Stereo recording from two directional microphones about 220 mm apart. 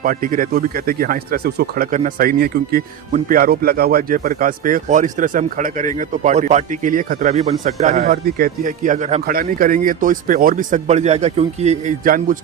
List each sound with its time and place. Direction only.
0.0 s speech: 40° right (ahead or behind)